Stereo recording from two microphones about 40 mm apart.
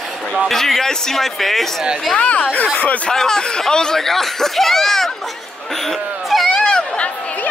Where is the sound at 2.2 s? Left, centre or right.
Left.